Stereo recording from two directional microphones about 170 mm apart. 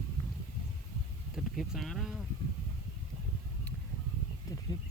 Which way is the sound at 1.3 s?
Centre (ahead or behind).